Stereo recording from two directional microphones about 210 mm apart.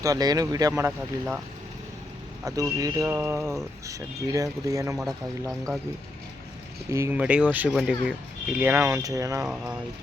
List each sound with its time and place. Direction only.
0.0 s speech: 20° right (ahead or behind)
2.4 s speech: 15° right (ahead or behind)
4.9 s speech: centre (ahead or behind)
6.9 s speech: 10° right (ahead or behind)
9.4 s speech: 5° right (ahead or behind)